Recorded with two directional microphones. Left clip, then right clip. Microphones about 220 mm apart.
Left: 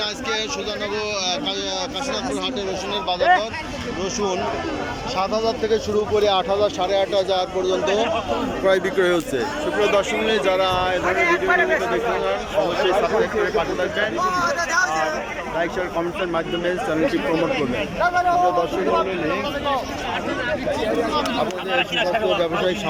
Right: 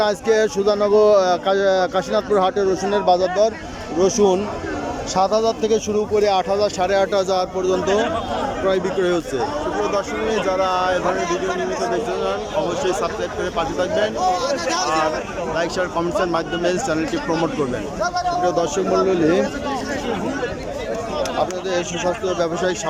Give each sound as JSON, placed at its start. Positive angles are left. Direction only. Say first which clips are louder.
{"t": 0.0, "sound": "speech", "louder": "right 7 dB", "side_deg": -30}
{"t": 10.5, "sound": "speech", "louder": "right 1 dB", "side_deg": -5}
{"t": 11.2, "sound": "a man's voice", "louder": "left 4 dB", "side_deg": 35}
{"t": 14.3, "sound": "speech", "louder": "right 1 dB", "side_deg": -25}
{"t": 15.5, "sound": "speech", "louder": "right 2 dB", "side_deg": -10}